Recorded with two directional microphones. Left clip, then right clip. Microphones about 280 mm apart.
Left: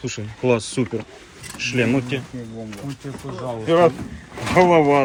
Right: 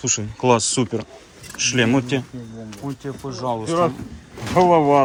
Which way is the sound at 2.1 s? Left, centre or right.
Right.